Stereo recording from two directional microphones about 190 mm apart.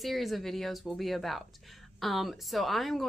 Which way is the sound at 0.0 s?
Centre (ahead or behind).